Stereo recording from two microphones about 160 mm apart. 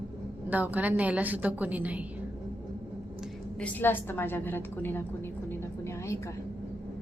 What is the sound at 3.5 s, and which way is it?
A woman's voice, 10° left (ahead or behind).